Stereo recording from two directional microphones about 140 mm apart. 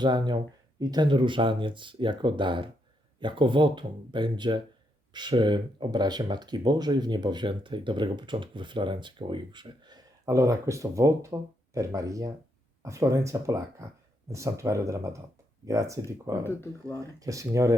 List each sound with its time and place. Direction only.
0.0 s speech: 30° right (ahead or behind)
16.4 s speech: 15° left (ahead or behind)
17.0 s speech: 25° right (ahead or behind)